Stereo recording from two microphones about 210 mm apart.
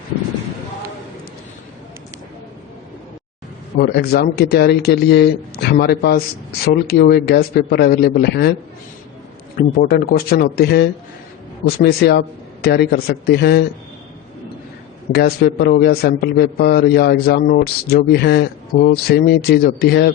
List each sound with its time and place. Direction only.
3.8 s a man's voice: 50° left (ahead or behind)
9.6 s a man's voice: 45° left (ahead or behind)
15.1 s a man's voice: 50° left (ahead or behind)